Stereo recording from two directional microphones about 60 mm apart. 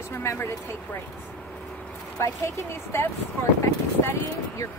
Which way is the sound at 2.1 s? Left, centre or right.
Left.